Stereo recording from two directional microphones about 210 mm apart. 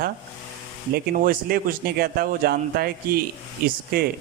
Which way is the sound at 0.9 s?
45° right (ahead or behind).